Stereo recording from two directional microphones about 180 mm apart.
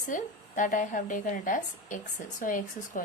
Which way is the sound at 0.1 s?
45° left (ahead or behind).